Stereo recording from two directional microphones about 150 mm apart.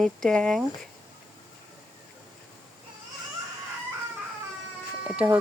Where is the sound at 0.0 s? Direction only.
5° left (ahead or behind).